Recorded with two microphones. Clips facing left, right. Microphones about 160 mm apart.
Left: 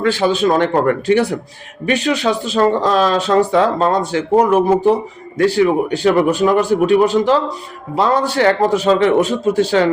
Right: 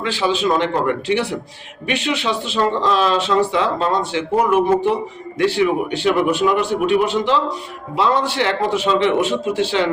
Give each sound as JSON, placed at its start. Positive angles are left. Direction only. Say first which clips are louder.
{"t": 0.0, "sound": "a man's voice", "louder": "left 5 dB", "side_deg": 45}